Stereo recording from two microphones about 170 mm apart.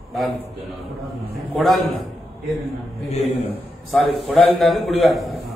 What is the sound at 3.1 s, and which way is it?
Speech, 40° left (ahead or behind).